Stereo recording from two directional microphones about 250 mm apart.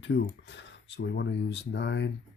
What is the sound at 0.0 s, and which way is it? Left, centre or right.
Speech, left.